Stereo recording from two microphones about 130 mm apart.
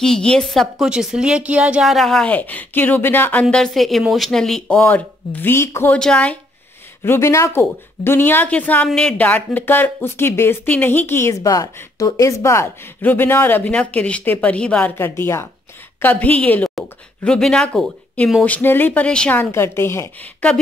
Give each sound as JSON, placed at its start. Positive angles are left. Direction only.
{"t": 0.0, "sound": "a woman's voice", "side_deg": 5}
{"t": 3.4, "sound": "a woman's voice", "side_deg": 5}
{"t": 5.9, "sound": "speech", "side_deg": 5}
{"t": 7.0, "sound": "speech", "side_deg": 20}
{"t": 19.5, "sound": "a woman's voice", "side_deg": 20}